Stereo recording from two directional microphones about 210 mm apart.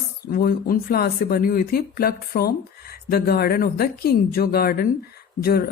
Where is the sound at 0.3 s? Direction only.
45° left (ahead or behind).